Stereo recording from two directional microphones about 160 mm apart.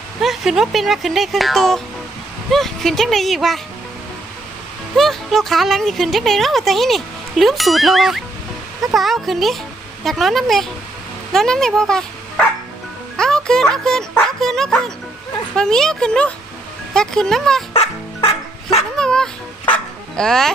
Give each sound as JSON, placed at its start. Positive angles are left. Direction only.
{"t": 0.2, "sound": "a woman's voice", "side_deg": 0}
{"t": 4.9, "sound": "a woman's voice", "side_deg": 0}
{"t": 13.1, "sound": "music", "side_deg": 5}
{"t": 14.4, "sound": "a woman's voice", "side_deg": 5}
{"t": 17.7, "sound": "music", "side_deg": 35}
{"t": 18.9, "sound": "dog", "side_deg": 5}
{"t": 20.1, "sound": "a woman's voice", "side_deg": 5}